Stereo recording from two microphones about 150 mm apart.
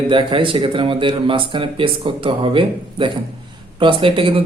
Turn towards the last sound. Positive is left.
turn(degrees=-35)  # may be behind; listen again after turning